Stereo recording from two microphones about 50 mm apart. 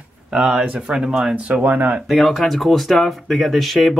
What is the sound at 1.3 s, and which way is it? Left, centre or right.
Speech, right.